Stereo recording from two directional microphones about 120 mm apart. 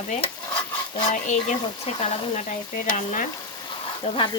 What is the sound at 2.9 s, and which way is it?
Frying, 90° left.